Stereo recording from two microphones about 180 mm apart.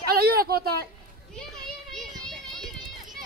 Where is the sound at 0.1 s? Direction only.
60° right (ahead or behind).